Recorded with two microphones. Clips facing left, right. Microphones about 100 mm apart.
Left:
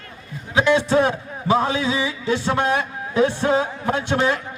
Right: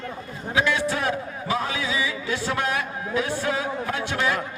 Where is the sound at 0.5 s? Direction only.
25° left (ahead or behind).